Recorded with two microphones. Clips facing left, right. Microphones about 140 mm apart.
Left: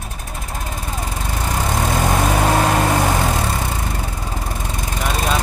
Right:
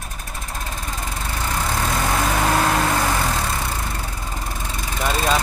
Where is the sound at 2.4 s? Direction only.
40° left (ahead or behind).